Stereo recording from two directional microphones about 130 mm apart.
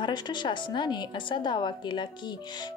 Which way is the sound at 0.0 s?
35° left (ahead or behind).